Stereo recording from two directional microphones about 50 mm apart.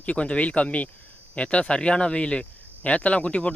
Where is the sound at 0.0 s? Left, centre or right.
Left.